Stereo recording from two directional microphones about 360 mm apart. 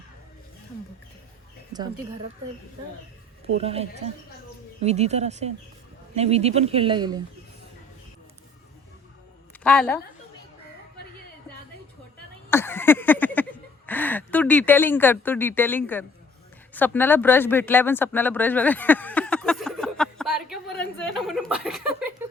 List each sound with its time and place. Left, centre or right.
1.7 s speech: centre
3.6 s speech: centre
9.6 s a woman's voice: centre
12.5 s a sound: centre
16.7 s speech: centre